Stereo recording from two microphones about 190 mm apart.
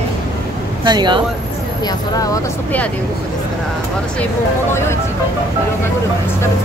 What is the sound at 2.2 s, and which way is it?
Speech, 20° left (ahead or behind).